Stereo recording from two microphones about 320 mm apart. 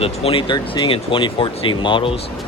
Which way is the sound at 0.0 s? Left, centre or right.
Centre.